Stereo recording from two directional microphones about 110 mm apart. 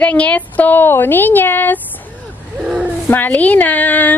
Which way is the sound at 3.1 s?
15° left (ahead or behind).